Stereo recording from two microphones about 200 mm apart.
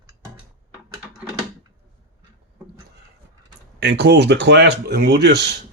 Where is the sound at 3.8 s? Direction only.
55° right (ahead or behind).